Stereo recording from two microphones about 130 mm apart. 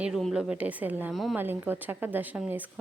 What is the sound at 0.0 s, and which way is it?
A woman's voice, centre (ahead or behind).